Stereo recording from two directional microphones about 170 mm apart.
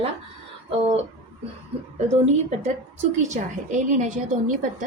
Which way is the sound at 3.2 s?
45° right (ahead or behind).